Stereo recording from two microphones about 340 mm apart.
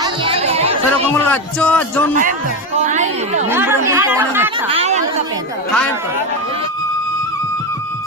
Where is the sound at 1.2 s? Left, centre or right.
Centre.